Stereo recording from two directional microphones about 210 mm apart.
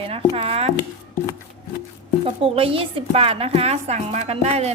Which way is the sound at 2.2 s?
25° right (ahead or behind).